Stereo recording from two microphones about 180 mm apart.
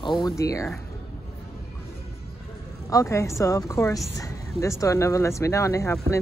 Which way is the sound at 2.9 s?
15° left (ahead or behind).